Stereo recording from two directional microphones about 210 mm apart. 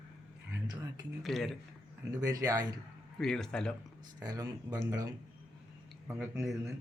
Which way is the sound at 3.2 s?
5° left (ahead or behind).